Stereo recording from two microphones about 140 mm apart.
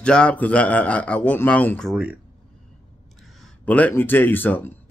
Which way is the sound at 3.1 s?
Centre (ahead or behind).